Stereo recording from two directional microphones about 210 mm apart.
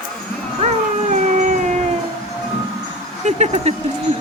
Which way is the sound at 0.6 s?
35° right (ahead or behind).